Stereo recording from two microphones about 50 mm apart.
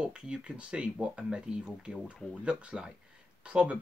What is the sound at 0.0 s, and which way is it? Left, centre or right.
Speech, right.